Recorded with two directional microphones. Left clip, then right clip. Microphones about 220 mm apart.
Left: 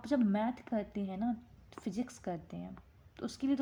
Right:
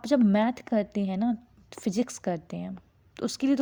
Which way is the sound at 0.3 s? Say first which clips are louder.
Right 9 dB; 40° right (ahead or behind).